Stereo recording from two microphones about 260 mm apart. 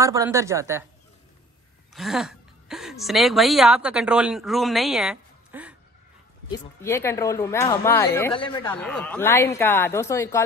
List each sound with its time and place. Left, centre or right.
0.0 s speech: centre
2.0 s a woman's voice: centre
6.5 s speech: centre
8.3 s speech: centre
8.6 s speech: centre